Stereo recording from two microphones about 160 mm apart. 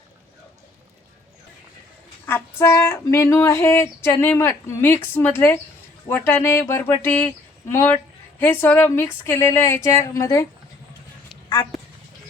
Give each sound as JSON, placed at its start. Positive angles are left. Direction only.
{"t": 2.2, "sound": "speech", "side_deg": 15}
{"t": 11.4, "sound": "speech", "side_deg": 25}